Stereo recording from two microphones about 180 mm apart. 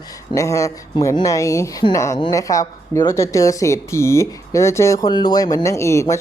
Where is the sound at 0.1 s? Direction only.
15° left (ahead or behind).